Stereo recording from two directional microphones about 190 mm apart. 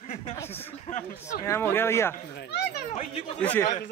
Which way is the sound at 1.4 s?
10° left (ahead or behind).